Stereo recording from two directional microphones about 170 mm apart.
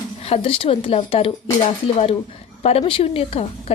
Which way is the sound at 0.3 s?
35° left (ahead or behind).